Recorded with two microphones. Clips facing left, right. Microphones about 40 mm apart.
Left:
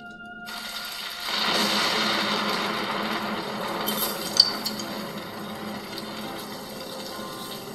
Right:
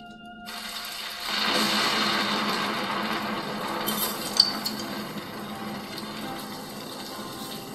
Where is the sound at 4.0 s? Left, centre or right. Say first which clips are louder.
Left 2 dB; centre.